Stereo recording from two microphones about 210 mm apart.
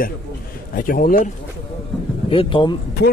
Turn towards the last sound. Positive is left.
turn(degrees=50)  # may be behind; listen again after turning